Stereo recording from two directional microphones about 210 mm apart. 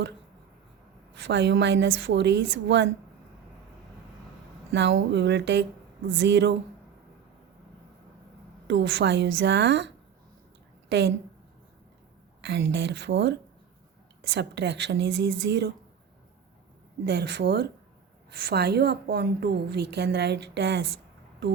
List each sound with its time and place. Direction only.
1.1 s a woman's voice: 60° right (ahead or behind)
4.7 s a woman's voice: 55° right (ahead or behind)
8.6 s a woman's voice: 60° right (ahead or behind)
12.4 s a woman's voice: 55° right (ahead or behind)
14.3 s a woman's voice: 55° right (ahead or behind)
17.0 s a woman's voice: 50° right (ahead or behind)